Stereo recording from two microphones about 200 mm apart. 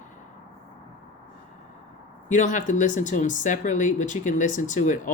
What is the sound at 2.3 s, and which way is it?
Speech, 40° left (ahead or behind).